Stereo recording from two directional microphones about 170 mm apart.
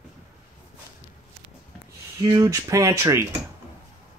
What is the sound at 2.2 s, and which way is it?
Speech, 20° right (ahead or behind).